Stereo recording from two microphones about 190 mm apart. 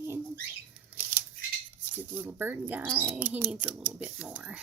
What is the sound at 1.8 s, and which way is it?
Speech, 10° right (ahead or behind).